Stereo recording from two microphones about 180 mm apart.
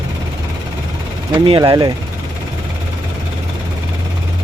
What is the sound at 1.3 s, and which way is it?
Speech, 25° right (ahead or behind).